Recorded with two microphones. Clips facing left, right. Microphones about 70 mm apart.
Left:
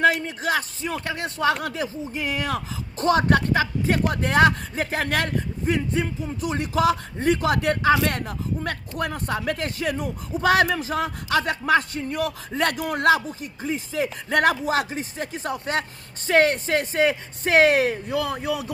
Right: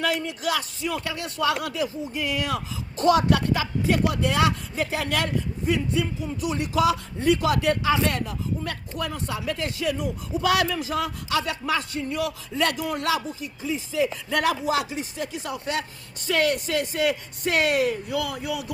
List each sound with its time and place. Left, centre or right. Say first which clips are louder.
0.0 s a man's voice: left 5 dB; left